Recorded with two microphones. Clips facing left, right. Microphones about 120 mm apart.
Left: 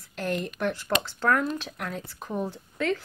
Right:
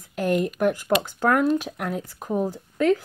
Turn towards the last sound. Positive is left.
turn(degrees=-5)  # may be behind; listen again after turning